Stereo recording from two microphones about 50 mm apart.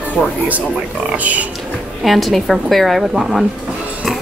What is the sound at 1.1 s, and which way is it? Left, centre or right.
Speech, right.